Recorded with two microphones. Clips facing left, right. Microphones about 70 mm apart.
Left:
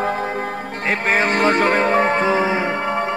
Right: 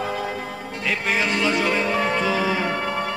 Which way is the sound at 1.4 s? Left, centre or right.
Left.